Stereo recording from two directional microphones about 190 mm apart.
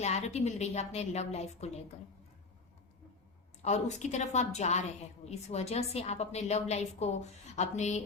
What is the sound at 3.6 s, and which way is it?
A woman's voice, 35° left (ahead or behind).